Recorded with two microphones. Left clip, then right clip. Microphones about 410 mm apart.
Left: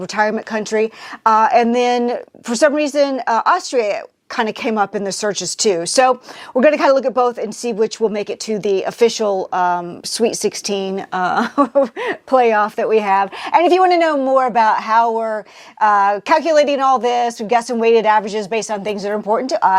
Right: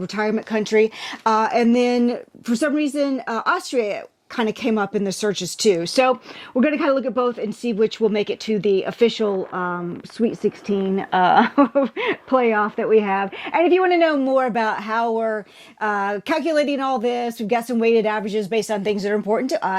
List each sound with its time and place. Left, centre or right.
0.2 s speech: left
8.0 s speech: left
10.9 s speech: left